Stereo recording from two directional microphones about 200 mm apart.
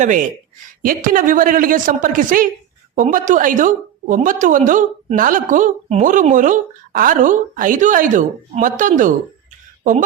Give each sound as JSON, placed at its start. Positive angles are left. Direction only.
{"t": 0.0, "sound": "a woman's voice", "side_deg": -40}